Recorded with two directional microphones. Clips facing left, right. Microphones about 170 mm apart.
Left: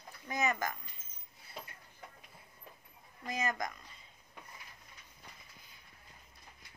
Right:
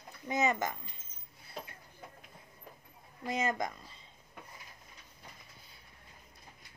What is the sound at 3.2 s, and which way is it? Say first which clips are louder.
Speech: right 3 dB; 25° right (ahead or behind).